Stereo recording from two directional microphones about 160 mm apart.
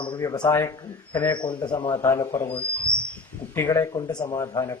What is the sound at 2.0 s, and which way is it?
Speech, 15° left (ahead or behind).